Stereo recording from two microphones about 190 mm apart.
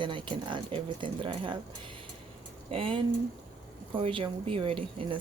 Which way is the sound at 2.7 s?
30° right (ahead or behind).